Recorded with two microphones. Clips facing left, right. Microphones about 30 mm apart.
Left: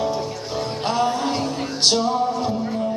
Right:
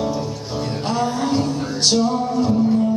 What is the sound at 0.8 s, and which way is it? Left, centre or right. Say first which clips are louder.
Music: even; left.